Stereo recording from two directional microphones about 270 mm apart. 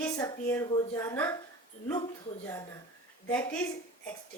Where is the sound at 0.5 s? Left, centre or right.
Centre.